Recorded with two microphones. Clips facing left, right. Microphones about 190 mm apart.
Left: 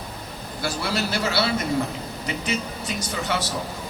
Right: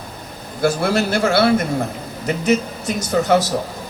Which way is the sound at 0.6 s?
50° right (ahead or behind).